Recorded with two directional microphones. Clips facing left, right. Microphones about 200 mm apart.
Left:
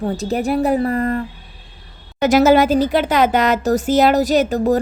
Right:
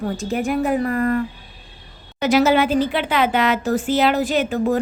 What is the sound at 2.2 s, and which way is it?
A woman's voice, 45° left (ahead or behind).